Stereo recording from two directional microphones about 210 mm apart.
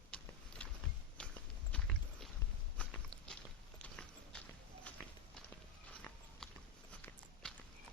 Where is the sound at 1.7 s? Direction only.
5° left (ahead or behind).